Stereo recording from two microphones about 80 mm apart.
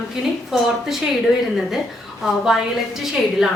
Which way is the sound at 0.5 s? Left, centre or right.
Centre.